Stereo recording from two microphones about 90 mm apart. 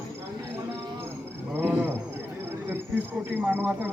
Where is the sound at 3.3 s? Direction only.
25° right (ahead or behind).